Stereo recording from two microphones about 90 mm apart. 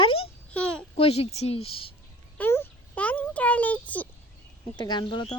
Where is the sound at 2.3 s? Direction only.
25° left (ahead or behind).